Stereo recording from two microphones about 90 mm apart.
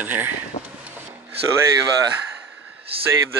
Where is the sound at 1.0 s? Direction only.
25° right (ahead or behind).